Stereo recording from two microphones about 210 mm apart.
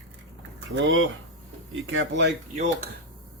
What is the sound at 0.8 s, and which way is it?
Speech, 65° right (ahead or behind).